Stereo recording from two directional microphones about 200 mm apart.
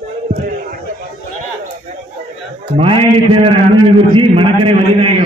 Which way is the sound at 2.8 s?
25° right (ahead or behind).